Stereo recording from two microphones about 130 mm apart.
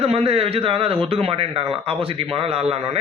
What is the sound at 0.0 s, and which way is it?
Speech, 50° right (ahead or behind).